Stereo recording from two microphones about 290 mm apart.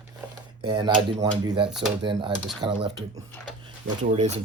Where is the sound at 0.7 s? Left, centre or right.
Centre.